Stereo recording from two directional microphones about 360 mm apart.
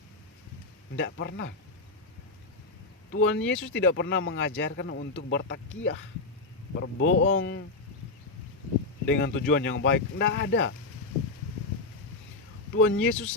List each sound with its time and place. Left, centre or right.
0.9 s speech: left
3.1 s speech: left
9.0 s speech: left
12.7 s speech: left